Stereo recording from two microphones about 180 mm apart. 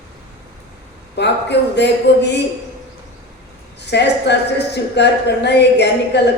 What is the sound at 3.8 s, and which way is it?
Speech, 70° left (ahead or behind).